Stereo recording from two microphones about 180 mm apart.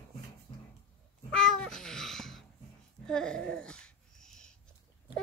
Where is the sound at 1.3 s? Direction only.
5° left (ahead or behind).